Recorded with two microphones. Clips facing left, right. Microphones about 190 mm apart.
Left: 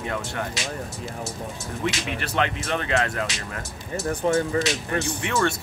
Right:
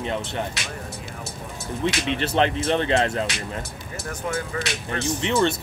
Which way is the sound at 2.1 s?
25° right (ahead or behind).